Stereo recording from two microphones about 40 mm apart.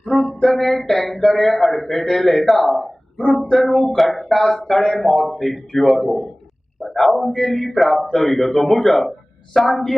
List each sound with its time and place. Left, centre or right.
0.1 s a sound: left
0.4 s a man's voice: centre
3.2 s speech: centre
3.5 s music: centre
4.1 s a man's voice: centre